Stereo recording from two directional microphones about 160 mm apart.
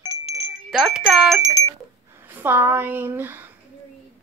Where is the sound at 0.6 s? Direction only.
Centre (ahead or behind).